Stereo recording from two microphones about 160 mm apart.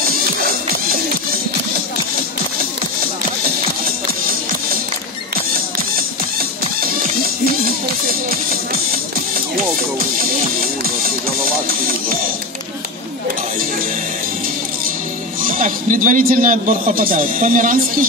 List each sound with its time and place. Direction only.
11.4 s music: 65° right (ahead or behind)
15.5 s a man's voice: 55° right (ahead or behind)